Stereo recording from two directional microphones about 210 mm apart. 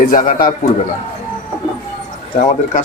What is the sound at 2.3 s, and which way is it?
Speech, 40° left (ahead or behind).